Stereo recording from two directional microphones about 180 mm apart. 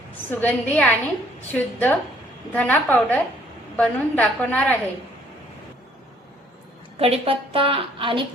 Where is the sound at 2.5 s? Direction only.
10° left (ahead or behind).